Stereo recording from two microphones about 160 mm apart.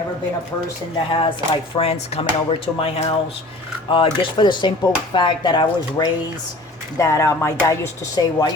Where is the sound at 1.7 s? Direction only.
40° left (ahead or behind).